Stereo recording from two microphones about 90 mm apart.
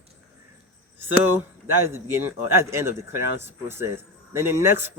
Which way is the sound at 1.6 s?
30° right (ahead or behind).